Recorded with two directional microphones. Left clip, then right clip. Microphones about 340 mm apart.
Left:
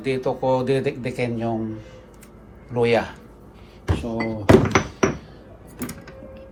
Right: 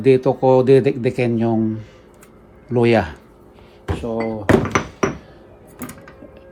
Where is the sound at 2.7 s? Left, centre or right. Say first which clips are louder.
Right 4 dB; right.